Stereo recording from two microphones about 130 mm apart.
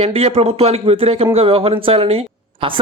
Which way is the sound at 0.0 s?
50° right (ahead or behind).